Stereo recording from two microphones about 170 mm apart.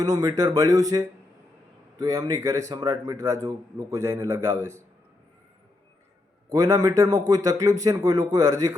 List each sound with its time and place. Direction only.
0.0 s a man's voice: 20° right (ahead or behind)
6.5 s a man's voice: 20° right (ahead or behind)